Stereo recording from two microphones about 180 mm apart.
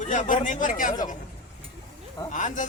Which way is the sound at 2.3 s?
45° left (ahead or behind).